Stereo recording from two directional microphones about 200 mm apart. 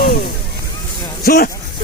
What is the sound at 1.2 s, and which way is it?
Speech, 50° left (ahead or behind).